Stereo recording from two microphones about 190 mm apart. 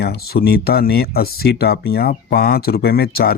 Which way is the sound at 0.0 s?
55° left (ahead or behind).